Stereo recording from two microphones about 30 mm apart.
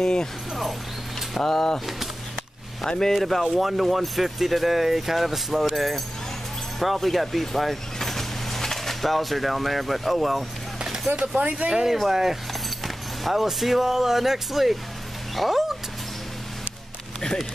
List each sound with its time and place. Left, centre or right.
0.0 s speech: left
1.4 s speech: centre
3.1 s speech: centre
11.4 s speech: right
11.7 s speech: centre